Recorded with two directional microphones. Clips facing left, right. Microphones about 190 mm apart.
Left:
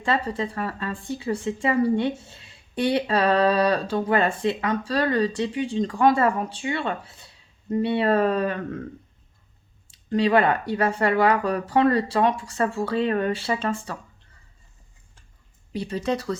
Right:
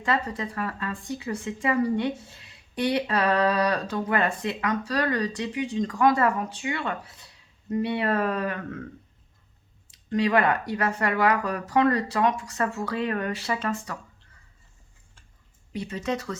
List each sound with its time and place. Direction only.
0.0 s speech: 30° left (ahead or behind)
9.9 s speech: 30° left (ahead or behind)
15.7 s speech: 35° left (ahead or behind)